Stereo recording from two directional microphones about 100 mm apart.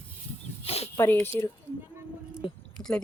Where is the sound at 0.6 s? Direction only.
90° left.